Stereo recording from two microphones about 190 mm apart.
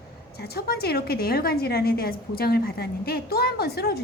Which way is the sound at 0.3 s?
55° left (ahead or behind).